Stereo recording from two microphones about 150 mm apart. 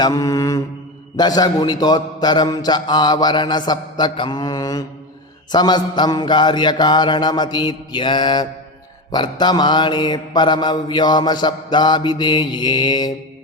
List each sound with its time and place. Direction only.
0.0 s mantra: 20° left (ahead or behind)